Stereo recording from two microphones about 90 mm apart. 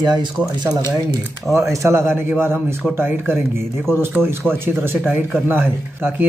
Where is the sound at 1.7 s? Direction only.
30° right (ahead or behind).